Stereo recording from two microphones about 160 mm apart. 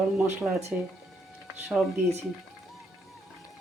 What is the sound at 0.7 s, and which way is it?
Speech, 10° right (ahead or behind).